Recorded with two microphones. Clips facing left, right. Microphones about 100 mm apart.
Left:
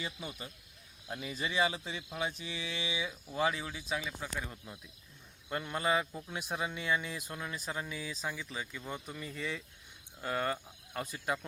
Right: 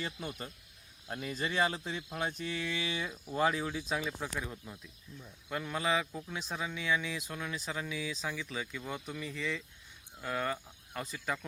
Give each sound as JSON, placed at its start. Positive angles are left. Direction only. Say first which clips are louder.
{"t": 0.0, "sound": "speech", "louder": "right 2 dB", "side_deg": 5}
{"t": 2.1, "sound": "mantra", "louder": "even", "side_deg": -50}
{"t": 2.5, "sound": "speech", "louder": "right 3 dB", "side_deg": 15}
{"t": 3.2, "sound": "speech", "louder": "right 3 dB", "side_deg": 0}